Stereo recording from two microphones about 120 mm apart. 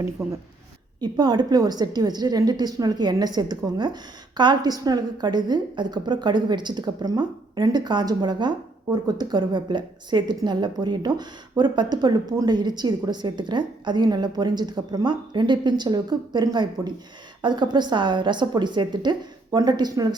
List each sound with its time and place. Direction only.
0.2 s a woman's voice: 25° right (ahead or behind)